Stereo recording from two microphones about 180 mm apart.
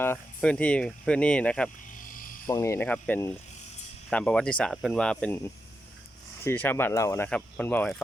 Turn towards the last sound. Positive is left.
turn(degrees=10)  # may be behind; listen again after turning